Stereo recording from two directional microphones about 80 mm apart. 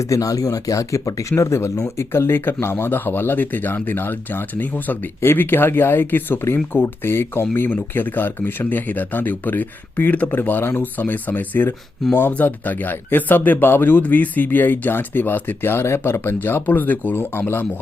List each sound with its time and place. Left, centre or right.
0.0 s speech: left